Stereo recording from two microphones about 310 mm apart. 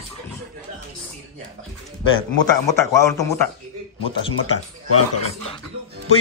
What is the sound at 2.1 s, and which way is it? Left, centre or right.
Speech, centre.